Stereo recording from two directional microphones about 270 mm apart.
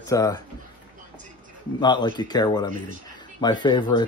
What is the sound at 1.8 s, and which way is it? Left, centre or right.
Speech, centre.